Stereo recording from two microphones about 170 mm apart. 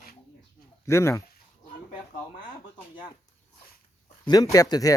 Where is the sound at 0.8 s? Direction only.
15° left (ahead or behind).